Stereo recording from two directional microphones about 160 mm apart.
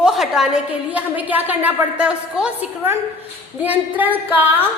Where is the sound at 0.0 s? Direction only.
Centre (ahead or behind).